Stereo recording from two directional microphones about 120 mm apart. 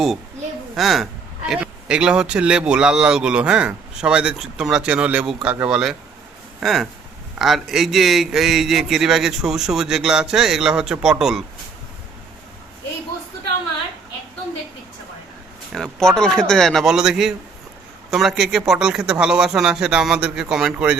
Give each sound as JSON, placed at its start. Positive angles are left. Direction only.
{"t": 0.8, "sound": "a man's voice", "side_deg": 0}
{"t": 15.7, "sound": "a man's voice", "side_deg": 0}